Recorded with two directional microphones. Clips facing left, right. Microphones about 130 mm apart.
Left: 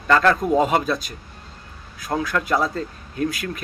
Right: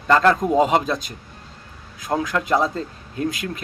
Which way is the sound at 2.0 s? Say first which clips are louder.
Right 1 dB; 20° right (ahead or behind).